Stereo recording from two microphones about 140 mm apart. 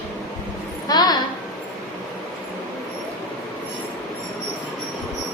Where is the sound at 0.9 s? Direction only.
30° left (ahead or behind).